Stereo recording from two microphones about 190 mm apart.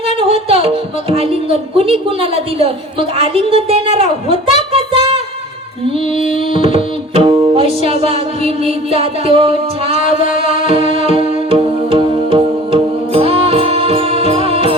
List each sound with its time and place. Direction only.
0.2 s music: 30° right (ahead or behind)
1.1 s a woman's voice: 30° right (ahead or behind)
4.7 s child singing: 25° right (ahead or behind)
6.1 s music: 30° right (ahead or behind)